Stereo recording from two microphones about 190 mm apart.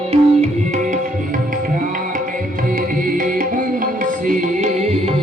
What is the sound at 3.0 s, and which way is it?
Music, 45° right (ahead or behind).